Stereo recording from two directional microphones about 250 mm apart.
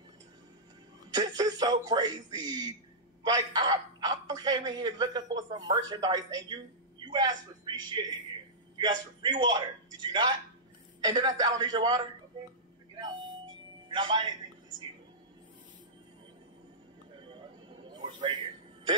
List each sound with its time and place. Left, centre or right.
1.1 s music: centre
1.6 s a woman's voice: centre
9.2 s a man's voice: centre
12.9 s vehicle: centre
13.8 s a man's voice: centre
17.3 s a sound: centre